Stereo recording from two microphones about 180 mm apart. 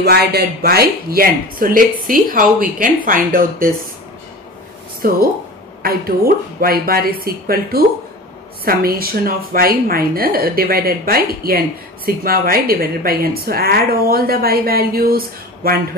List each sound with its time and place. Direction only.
0.0 s speech: 65° right (ahead or behind)
5.0 s a woman's voice: 50° right (ahead or behind)